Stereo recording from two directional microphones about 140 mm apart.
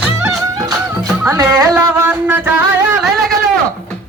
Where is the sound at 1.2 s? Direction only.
25° right (ahead or behind).